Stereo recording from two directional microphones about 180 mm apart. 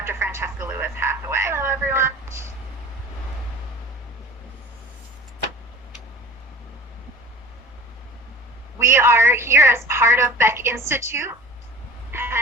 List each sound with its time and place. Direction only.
0.0 s speech: 15° right (ahead or behind)
8.8 s a woman's voice: 15° right (ahead or behind)
12.1 s a sound: 15° right (ahead or behind)